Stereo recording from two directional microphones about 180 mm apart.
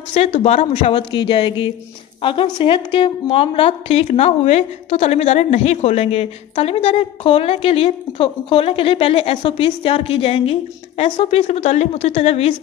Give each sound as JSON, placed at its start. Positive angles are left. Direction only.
{"t": 0.1, "sound": "a woman's voice", "side_deg": 35}